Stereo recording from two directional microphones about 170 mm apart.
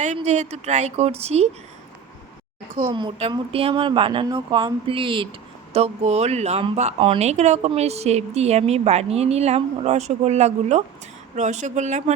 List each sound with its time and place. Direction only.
0.0 s speech: 40° right (ahead or behind)
2.9 s speech: 30° right (ahead or behind)